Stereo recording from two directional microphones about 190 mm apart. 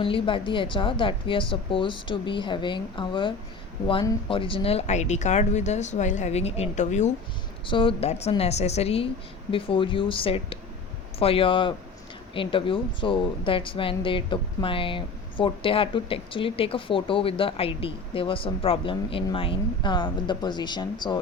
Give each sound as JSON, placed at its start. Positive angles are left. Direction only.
{"t": 0.0, "sound": "speech", "side_deg": 30}
{"t": 7.7, "sound": "speech", "side_deg": 25}